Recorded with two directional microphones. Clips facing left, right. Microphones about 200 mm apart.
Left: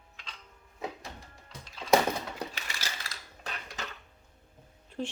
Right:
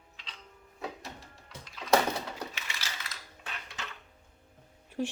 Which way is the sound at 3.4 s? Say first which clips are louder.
Left 4 dB; 40° left (ahead or behind).